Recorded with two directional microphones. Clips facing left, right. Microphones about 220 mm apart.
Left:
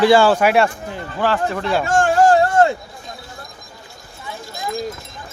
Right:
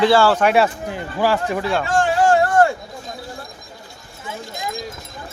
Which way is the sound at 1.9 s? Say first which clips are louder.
Left 3 dB; 50° left (ahead or behind).